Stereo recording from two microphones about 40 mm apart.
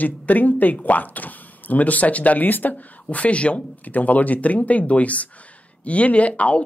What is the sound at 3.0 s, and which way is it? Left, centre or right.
Speech, left.